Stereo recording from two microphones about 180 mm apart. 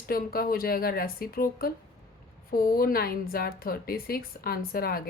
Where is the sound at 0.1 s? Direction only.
55° left (ahead or behind).